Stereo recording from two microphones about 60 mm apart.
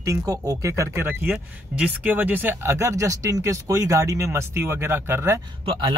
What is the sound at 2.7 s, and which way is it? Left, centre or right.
Speech, right.